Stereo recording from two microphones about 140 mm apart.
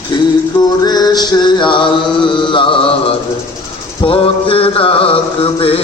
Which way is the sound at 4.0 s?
40° left (ahead or behind).